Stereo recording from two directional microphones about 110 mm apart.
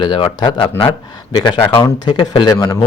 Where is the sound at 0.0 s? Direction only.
50° left (ahead or behind).